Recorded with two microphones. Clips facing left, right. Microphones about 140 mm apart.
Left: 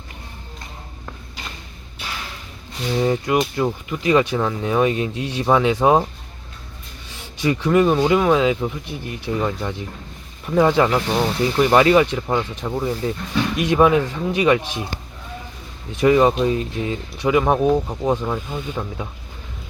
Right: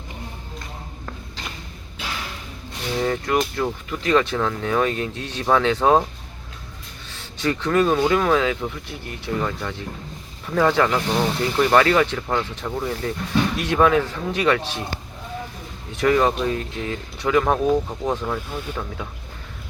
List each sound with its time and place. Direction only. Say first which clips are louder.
3.0 s speech: left 3 dB; 15° left (ahead or behind)
7.1 s speech: left 3 dB; 15° left (ahead or behind)
16.0 s speech: left 4 dB; 15° left (ahead or behind)
18.3 s speech: left 2 dB; centre (ahead or behind)